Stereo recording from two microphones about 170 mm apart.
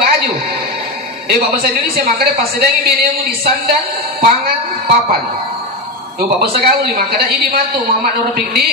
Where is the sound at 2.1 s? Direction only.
65° right (ahead or behind).